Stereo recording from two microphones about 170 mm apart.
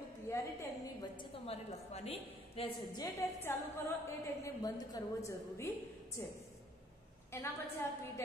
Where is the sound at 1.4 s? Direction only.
35° left (ahead or behind).